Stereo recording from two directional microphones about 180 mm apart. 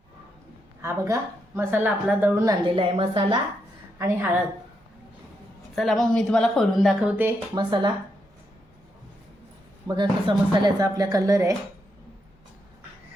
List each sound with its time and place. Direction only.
0.8 s a woman's voice: 15° right (ahead or behind)
3.9 s a woman's voice: 15° right (ahead or behind)
5.7 s a woman's voice: centre (ahead or behind)
7.5 s a woman's voice: 25° right (ahead or behind)
9.8 s a woman's voice: 25° right (ahead or behind)